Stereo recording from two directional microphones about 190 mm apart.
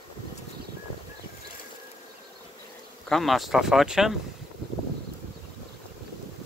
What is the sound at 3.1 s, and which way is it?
Speech, centre (ahead or behind).